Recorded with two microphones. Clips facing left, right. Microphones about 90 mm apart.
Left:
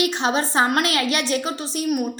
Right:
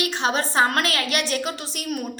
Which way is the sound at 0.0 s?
25° left (ahead or behind).